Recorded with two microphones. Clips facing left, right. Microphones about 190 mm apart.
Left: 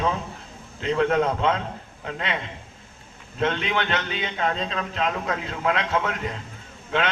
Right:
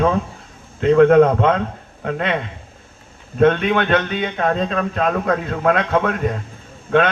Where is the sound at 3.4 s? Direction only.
55° right (ahead or behind).